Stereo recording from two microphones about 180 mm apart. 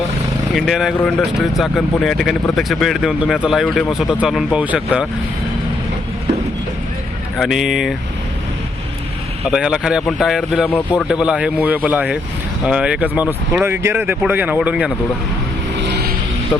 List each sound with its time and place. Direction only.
0.5 s speech: centre (ahead or behind)
7.3 s speech: centre (ahead or behind)
9.5 s speech: 5° right (ahead or behind)
15.8 s vehicle: 65° right (ahead or behind)